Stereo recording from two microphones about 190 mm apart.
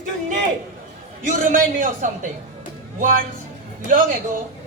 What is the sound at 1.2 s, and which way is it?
A man's voice, 40° right (ahead or behind).